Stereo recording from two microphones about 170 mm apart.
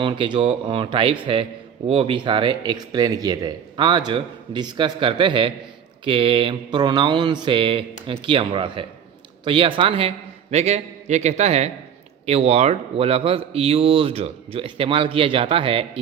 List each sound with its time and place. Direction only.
0.0 s speech: 30° right (ahead or behind)